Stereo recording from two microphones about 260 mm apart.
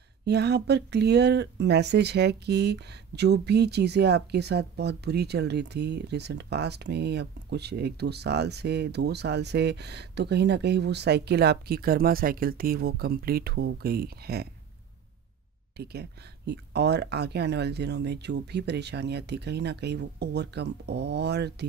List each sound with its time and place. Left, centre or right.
0.2 s speech: right
15.8 s speech: right